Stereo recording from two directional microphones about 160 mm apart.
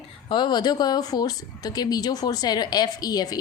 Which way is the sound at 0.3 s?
30° left (ahead or behind).